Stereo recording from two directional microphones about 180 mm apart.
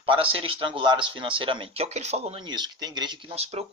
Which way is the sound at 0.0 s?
30° right (ahead or behind).